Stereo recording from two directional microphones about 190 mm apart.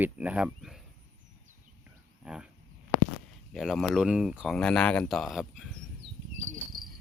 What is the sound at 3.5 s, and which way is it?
Speech, centre (ahead or behind).